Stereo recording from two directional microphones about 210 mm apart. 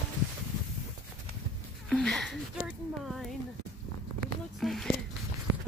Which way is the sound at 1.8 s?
Centre (ahead or behind).